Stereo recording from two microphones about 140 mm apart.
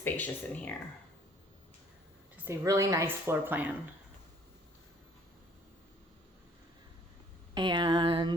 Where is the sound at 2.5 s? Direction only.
20° right (ahead or behind).